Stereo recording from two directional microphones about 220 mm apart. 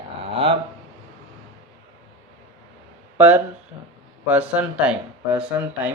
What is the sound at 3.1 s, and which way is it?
Speech, 10° right (ahead or behind).